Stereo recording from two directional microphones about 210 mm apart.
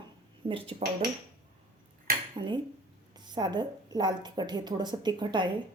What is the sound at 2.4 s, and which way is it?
A woman's voice, 20° right (ahead or behind).